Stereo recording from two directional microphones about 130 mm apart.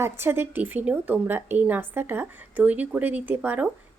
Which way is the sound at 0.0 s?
20° right (ahead or behind).